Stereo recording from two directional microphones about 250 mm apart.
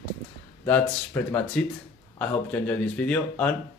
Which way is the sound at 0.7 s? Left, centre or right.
Centre.